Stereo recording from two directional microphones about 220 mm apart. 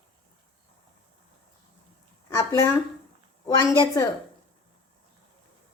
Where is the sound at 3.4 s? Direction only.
15° left (ahead or behind).